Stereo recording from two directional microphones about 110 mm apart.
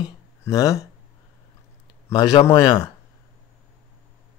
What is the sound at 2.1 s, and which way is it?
Speech, 40° left (ahead or behind).